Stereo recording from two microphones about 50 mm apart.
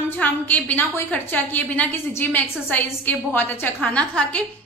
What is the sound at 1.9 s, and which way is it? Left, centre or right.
Speech, left.